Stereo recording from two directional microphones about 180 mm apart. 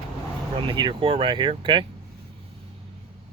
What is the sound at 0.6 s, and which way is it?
Speech, 25° right (ahead or behind).